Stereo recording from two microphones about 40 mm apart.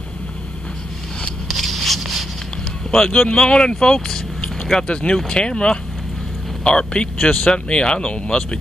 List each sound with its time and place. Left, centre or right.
1.5 s a sound: centre
3.1 s speech: left
3.6 s vehicle: left
4.8 s speech: left